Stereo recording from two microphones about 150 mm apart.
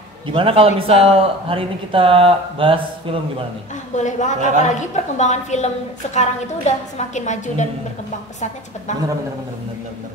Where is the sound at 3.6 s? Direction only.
55° left (ahead or behind).